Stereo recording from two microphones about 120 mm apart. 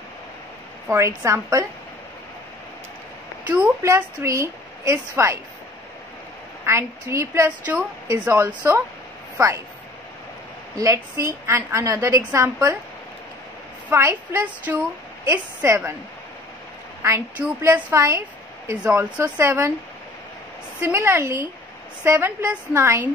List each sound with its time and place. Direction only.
0.8 s a woman's voice: 25° right (ahead or behind)
3.4 s speech: 10° right (ahead or behind)
3.8 s a woman's voice: 25° right (ahead or behind)
6.6 s a woman's voice: 20° right (ahead or behind)
8.1 s a woman's voice: 25° right (ahead or behind)
10.8 s a woman's voice: 25° right (ahead or behind)
13.8 s a woman's voice: 15° right (ahead or behind)
17.6 s a woman's voice: 15° right (ahead or behind)
17.9 s a woman's voice: 25° right (ahead or behind)
18.8 s a woman's voice: 10° right (ahead or behind)
20.8 s a woman's voice: 20° right (ahead or behind)